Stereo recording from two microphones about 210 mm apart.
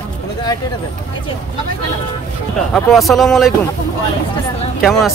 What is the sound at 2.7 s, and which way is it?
Speech, centre (ahead or behind).